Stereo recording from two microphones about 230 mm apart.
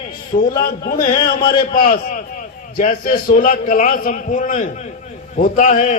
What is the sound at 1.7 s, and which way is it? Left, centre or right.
A man's voice, left.